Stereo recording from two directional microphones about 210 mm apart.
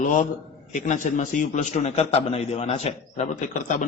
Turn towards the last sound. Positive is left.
turn(degrees=35)  # may be behind; listen again after turning